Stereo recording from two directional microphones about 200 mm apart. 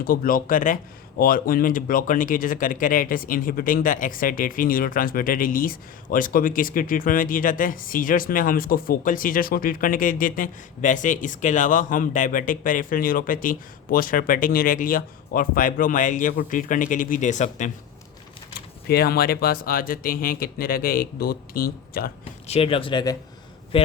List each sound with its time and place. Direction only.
0.0 s speech: 45° left (ahead or behind)
18.9 s speech: 50° left (ahead or behind)
22.2 s a man's voice: 30° left (ahead or behind)